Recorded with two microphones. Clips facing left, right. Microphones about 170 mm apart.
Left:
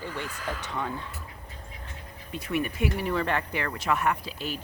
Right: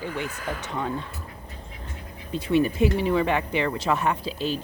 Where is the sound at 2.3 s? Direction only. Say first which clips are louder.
Right 8 dB; 30° right (ahead or behind).